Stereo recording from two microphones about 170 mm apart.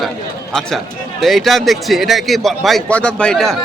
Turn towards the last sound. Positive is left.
turn(degrees=5)  # may be behind; listen again after turning